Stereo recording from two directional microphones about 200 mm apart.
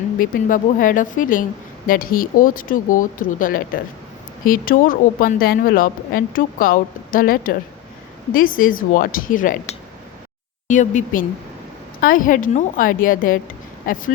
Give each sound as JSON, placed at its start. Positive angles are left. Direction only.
{"t": 0.2, "sound": "a woman's voice", "side_deg": 40}
{"t": 10.7, "sound": "a woman's voice", "side_deg": 40}